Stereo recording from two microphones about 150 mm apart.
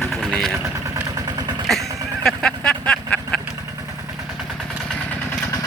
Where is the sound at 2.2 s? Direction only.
5° left (ahead or behind).